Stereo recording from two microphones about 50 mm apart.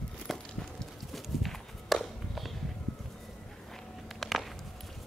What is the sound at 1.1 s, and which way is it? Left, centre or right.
Walk, centre.